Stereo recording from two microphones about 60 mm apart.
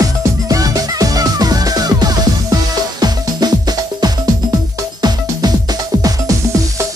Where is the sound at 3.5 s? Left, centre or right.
Right.